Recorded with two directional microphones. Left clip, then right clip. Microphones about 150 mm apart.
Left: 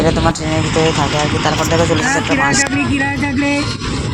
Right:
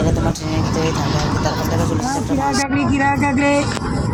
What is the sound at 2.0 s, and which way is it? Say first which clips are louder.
Speech: left 6 dB; 15° left (ahead or behind).